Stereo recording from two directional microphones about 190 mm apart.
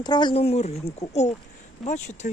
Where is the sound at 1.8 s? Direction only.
40° left (ahead or behind).